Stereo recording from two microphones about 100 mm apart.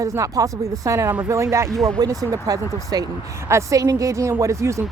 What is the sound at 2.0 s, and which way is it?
Speech, 35° right (ahead or behind).